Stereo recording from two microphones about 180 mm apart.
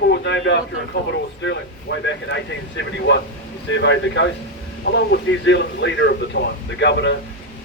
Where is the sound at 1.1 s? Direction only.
90° left.